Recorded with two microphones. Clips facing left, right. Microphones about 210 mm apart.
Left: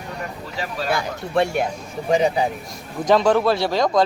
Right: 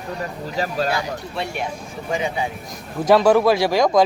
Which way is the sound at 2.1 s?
35° left (ahead or behind).